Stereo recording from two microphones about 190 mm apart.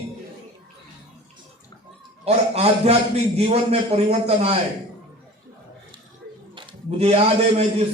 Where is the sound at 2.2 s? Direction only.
35° right (ahead or behind).